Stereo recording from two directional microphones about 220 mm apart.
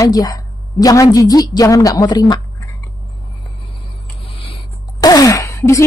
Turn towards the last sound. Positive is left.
turn(degrees=15)  # may be behind; listen again after turning